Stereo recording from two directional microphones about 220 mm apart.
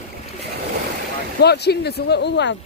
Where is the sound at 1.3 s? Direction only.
50° left (ahead or behind).